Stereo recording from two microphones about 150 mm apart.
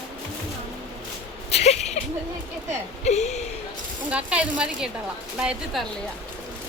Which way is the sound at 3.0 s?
50° left (ahead or behind).